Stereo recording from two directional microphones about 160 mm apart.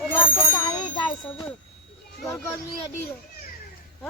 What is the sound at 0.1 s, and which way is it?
Bicycle bell, 15° left (ahead or behind).